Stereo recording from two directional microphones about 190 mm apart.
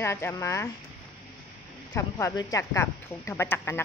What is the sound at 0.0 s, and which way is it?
Speech, 15° left (ahead or behind).